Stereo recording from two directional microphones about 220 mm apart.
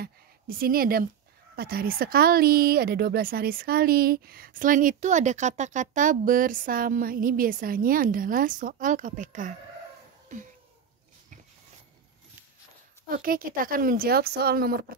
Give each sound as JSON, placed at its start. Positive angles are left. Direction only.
{"t": 0.0, "sound": "a sound", "side_deg": -40}
{"t": 1.6, "sound": "speech", "side_deg": -45}
{"t": 13.1, "sound": "speech", "side_deg": -40}